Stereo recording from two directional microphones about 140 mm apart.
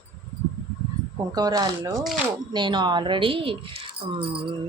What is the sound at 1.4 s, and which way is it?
Speech, 30° right (ahead or behind).